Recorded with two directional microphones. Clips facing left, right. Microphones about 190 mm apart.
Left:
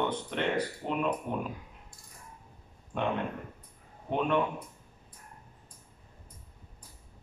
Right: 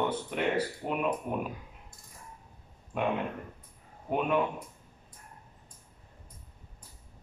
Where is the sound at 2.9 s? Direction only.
5° right (ahead or behind).